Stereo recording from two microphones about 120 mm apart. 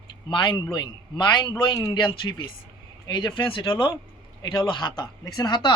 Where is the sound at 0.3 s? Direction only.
40° left (ahead or behind).